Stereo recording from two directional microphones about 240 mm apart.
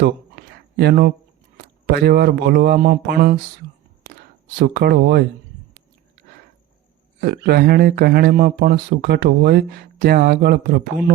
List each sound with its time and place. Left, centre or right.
0.0 s a sound: right
1.5 s speech: right
4.6 s speech: right
7.2 s speech: right